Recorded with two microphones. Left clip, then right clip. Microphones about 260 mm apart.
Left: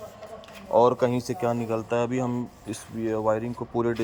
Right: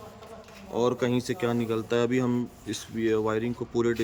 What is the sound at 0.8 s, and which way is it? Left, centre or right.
Speech, centre.